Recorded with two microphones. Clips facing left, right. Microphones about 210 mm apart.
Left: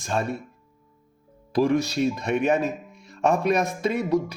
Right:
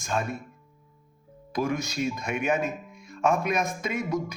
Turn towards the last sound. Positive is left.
turn(degrees=35)  # may be behind; listen again after turning